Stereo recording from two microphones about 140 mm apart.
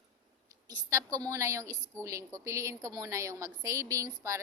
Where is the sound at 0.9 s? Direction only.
20° right (ahead or behind).